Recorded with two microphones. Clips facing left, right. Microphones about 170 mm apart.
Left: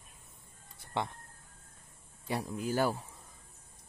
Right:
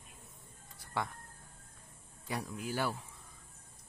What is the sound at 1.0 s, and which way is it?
Speech, 25° left (ahead or behind).